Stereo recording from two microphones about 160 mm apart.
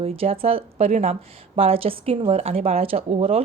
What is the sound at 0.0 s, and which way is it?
A woman's voice, 35° right (ahead or behind).